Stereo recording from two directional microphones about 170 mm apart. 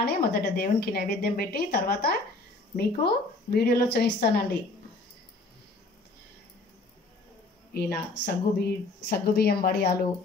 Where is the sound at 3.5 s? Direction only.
65° left (ahead or behind).